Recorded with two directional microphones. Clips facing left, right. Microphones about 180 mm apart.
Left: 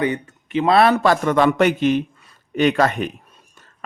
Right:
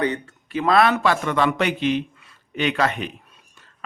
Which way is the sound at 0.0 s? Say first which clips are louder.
Left 2 dB; 20° left (ahead or behind).